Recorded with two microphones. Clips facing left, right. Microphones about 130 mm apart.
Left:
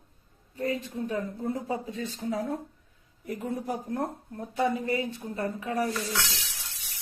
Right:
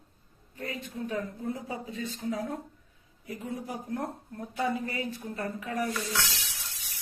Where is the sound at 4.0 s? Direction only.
25° left (ahead or behind).